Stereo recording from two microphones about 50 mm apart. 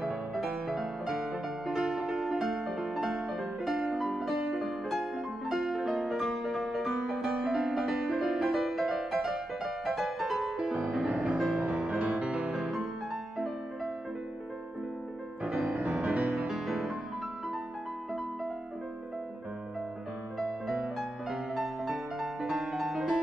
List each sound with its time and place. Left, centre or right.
0.7 s music: centre
10.6 s music: right
11.2 s music: centre
11.6 s music: right
12.5 s music: centre
15.4 s music: right
16.4 s music: centre
21.5 s music: centre